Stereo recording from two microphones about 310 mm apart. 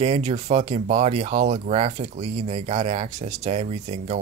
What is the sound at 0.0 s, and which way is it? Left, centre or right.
Speech, centre.